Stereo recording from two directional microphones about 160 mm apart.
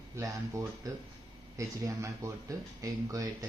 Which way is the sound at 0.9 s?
20° right (ahead or behind).